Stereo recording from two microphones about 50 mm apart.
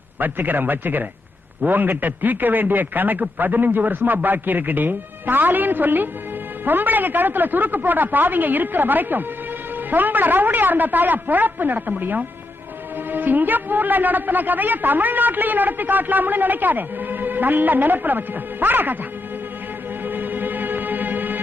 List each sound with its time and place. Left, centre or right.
0.2 s a man's voice: right
20.1 s music: right